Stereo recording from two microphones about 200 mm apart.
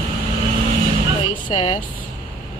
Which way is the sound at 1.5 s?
35° left (ahead or behind).